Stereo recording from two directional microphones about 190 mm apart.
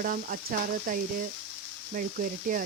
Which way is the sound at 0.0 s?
50° right (ahead or behind).